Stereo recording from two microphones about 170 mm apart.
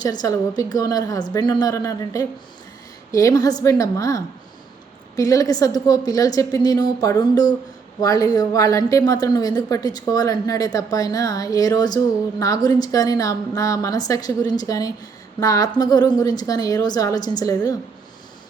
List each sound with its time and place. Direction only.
0.0 s a woman's voice: 25° left (ahead or behind)